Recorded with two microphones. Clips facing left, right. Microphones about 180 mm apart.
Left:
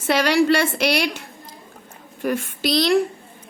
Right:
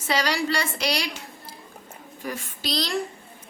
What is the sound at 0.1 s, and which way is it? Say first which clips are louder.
A woman's voice: left 8 dB; 60° left (ahead or behind).